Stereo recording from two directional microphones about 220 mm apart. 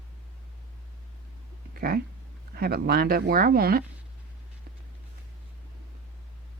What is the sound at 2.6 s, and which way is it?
Speech, 45° right (ahead or behind).